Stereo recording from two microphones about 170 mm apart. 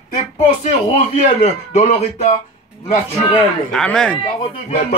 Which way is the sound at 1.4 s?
40° left (ahead or behind).